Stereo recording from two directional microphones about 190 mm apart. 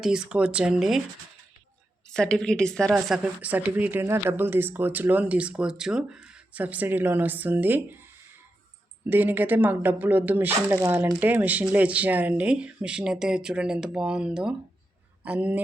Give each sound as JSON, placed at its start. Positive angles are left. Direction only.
{"t": 0.0, "sound": "speech", "side_deg": -5}
{"t": 2.0, "sound": "speech", "side_deg": 5}
{"t": 9.0, "sound": "speech", "side_deg": -10}